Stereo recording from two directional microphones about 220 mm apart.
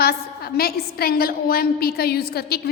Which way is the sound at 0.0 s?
45° left (ahead or behind).